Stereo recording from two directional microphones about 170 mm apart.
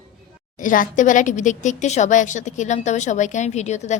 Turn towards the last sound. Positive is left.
turn(degrees=40)  # may be behind; listen again after turning